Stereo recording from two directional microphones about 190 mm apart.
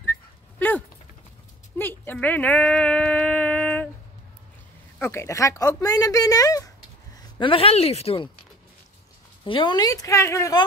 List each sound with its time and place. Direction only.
0.0 s dog: 10° left (ahead or behind)
1.8 s a sound: 10° left (ahead or behind)
4.9 s a woman's voice: 15° left (ahead or behind); by 8.3 s 30° left (ahead or behind)
9.4 s a woman's voice: 25° left (ahead or behind)